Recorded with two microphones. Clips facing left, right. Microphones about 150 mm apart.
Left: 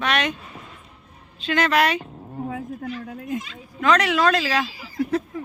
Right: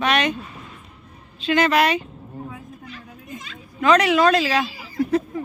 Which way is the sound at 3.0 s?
70° left (ahead or behind).